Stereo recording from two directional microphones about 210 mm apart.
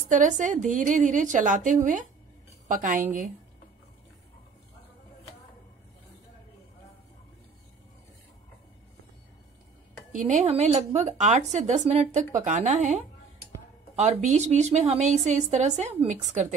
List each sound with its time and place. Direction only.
0.1 s a woman's voice: 35° right (ahead or behind)
10.1 s a woman's voice: 35° right (ahead or behind)
14.3 s a woman's voice: 35° right (ahead or behind)